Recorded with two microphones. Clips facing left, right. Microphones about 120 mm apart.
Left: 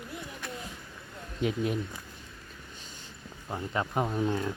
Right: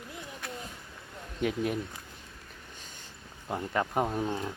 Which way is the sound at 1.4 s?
55° right (ahead or behind).